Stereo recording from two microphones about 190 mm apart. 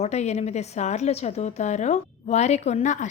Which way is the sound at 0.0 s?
35° left (ahead or behind).